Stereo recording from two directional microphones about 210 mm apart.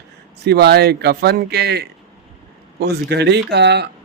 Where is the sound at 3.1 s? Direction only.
55° right (ahead or behind).